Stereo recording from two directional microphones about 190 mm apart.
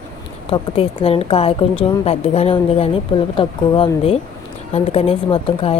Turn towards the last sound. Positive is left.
turn(degrees=30)  # may be behind; listen again after turning